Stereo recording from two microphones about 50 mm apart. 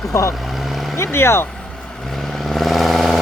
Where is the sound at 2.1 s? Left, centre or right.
Centre.